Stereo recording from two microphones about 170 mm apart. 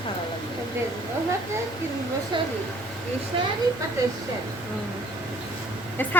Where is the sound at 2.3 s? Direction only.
25° right (ahead or behind).